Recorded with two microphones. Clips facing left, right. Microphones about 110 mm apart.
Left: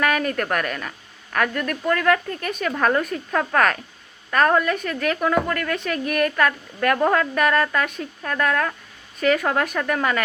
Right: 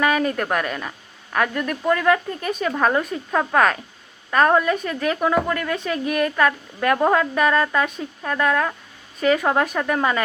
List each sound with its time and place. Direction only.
0.0 s a woman's voice: 20° right (ahead or behind)